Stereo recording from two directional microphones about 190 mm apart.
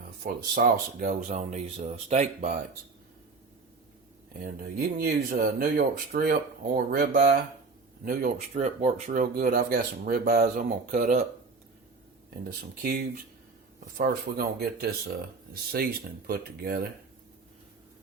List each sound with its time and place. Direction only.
0.2 s speech: 50° right (ahead or behind)
4.8 s speech: 50° right (ahead or behind)
12.8 s speech: 50° right (ahead or behind)